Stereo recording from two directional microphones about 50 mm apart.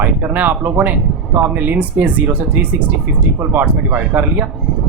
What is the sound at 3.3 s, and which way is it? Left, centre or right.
Speech, right.